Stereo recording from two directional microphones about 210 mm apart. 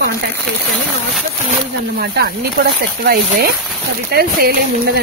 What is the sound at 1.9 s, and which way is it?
Speech, 50° right (ahead or behind).